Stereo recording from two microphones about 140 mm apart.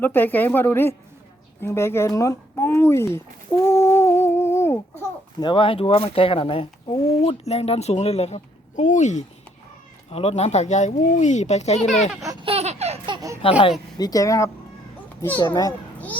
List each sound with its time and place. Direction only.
0.0 s speech: 15° left (ahead or behind)
1.6 s a sound: 20° left (ahead or behind)
5.4 s speech: 35° left (ahead or behind); by 12.1 s 55° left (ahead or behind)
12.4 s baby laughter: 45° right (ahead or behind)
13.4 s speech: 40° left (ahead or behind)
14.0 s speech: 25° left (ahead or behind)